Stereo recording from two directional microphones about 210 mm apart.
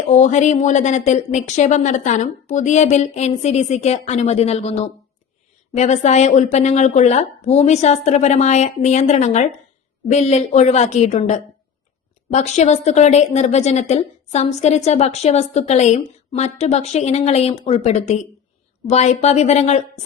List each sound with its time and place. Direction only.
0.1 s a woman's voice: 35° left (ahead or behind)